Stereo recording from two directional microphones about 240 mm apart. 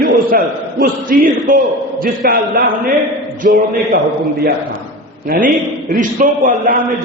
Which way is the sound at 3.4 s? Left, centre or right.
Right.